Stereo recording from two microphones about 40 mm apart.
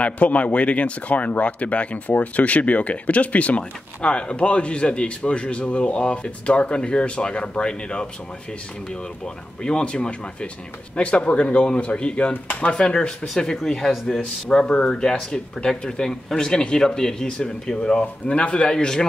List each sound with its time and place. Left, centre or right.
0.0 s speech: left
9.2 s speech: centre
12.8 s speech: left
14.6 s speech: left